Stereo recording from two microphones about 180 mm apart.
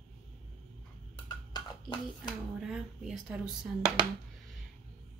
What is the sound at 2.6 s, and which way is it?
Speech, centre (ahead or behind).